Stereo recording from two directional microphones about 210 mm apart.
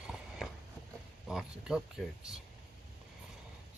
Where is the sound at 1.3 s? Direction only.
5° right (ahead or behind).